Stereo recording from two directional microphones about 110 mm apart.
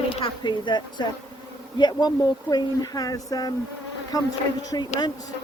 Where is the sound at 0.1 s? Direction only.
50° left (ahead or behind).